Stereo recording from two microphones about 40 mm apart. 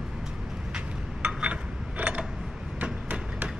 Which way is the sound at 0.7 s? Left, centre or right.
Right.